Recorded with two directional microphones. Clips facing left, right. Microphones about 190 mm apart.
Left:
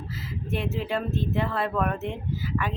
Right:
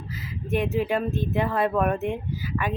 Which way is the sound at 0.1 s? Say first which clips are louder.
Right 5 dB; 15° right (ahead or behind).